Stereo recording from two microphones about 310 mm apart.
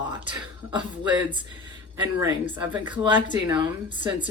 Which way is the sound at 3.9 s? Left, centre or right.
Left.